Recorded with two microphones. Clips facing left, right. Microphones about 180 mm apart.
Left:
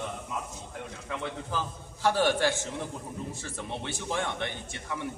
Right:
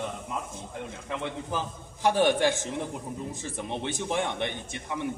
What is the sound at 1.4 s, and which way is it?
A man's voice, 15° right (ahead or behind).